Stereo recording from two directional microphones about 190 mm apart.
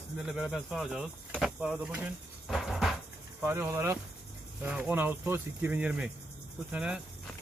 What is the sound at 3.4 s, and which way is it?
Speech, 10° right (ahead or behind).